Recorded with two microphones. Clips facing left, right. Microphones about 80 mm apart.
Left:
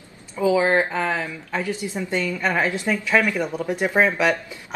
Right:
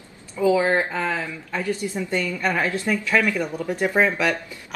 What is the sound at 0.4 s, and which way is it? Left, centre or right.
Speech, left.